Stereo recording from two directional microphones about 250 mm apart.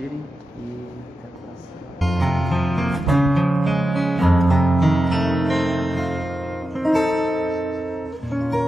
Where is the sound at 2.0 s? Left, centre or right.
Centre.